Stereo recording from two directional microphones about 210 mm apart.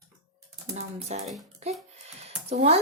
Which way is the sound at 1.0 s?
30° right (ahead or behind).